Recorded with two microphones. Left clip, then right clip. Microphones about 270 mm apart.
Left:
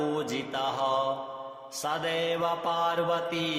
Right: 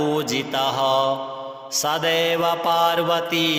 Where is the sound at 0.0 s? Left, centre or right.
Right.